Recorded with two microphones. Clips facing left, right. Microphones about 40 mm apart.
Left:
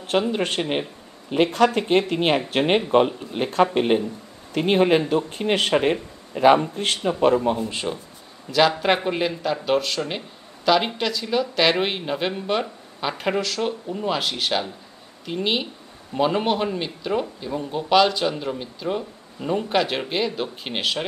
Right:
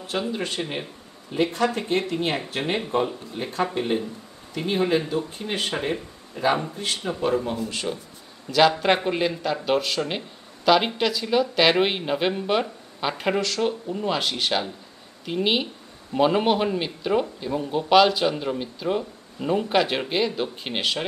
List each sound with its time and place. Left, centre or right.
0.3 s speech: left
0.6 s speech: left
1.3 s speech: left
7.5 s speech: left
8.5 s speech: centre